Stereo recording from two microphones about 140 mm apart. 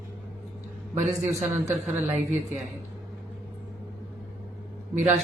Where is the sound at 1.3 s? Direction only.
20° right (ahead or behind).